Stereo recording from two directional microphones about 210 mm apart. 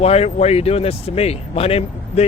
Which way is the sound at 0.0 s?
30° left (ahead or behind).